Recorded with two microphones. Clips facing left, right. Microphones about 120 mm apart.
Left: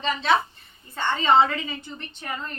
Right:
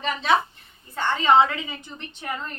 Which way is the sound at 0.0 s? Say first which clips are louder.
Even; 10° right (ahead or behind).